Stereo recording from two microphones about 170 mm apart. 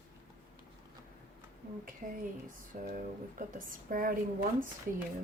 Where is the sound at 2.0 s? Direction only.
50° right (ahead or behind).